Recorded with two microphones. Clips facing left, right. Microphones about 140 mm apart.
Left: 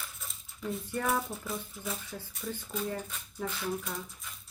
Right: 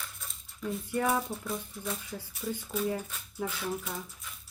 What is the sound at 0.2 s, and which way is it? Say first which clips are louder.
Dog: right 2 dB; centre (ahead or behind).